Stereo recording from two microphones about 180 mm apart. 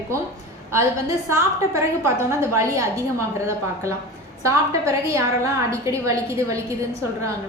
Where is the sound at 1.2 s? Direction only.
15° right (ahead or behind).